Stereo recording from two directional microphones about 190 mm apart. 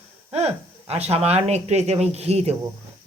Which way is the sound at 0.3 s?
35° right (ahead or behind).